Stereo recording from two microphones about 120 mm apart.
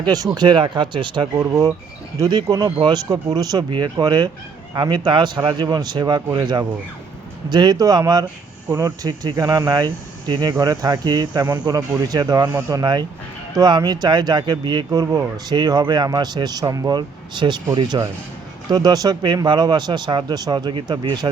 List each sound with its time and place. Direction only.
0.3 s a man's voice: 40° right (ahead or behind)
1.4 s a man's voice: 25° right (ahead or behind); by 21.2 s 40° right (ahead or behind)